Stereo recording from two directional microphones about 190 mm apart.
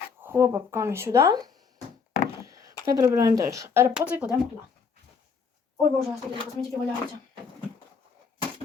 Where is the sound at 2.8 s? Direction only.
15° right (ahead or behind).